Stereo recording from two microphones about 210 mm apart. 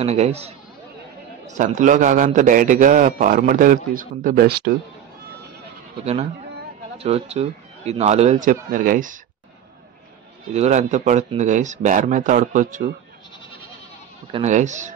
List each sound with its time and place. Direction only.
0.0 s a man's voice: 30° right (ahead or behind); by 4.6 s 45° right (ahead or behind)
7.0 s a man's voice: 30° right (ahead or behind)
10.5 s a man's voice: 35° right (ahead or behind)
14.3 s a man's voice: 35° right (ahead or behind)